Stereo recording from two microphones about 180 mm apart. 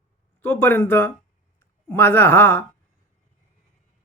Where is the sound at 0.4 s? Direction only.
10° left (ahead or behind).